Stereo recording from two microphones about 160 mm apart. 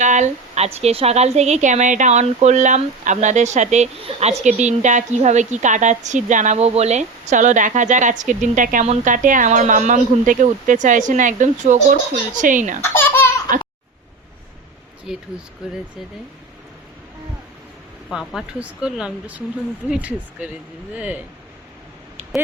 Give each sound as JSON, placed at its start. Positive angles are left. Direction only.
{"t": 0.0, "sound": "speech", "side_deg": -50}
{"t": 12.8, "sound": "baby laughter", "side_deg": 15}
{"t": 15.1, "sound": "speech", "side_deg": -5}
{"t": 18.1, "sound": "speech", "side_deg": -5}